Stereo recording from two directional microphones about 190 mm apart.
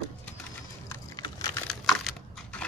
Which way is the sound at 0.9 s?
20° left (ahead or behind).